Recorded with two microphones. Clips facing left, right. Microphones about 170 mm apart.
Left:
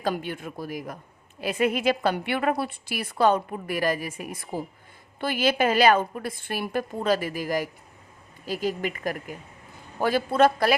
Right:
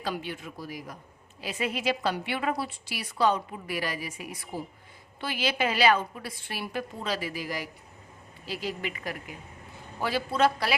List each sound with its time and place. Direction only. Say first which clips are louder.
0.0 s a woman's voice: left 5 dB; 50° left (ahead or behind)